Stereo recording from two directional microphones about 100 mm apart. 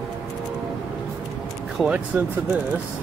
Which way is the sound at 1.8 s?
10° right (ahead or behind).